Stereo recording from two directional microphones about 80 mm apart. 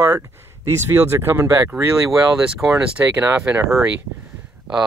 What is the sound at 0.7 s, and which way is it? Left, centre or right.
Speech, right.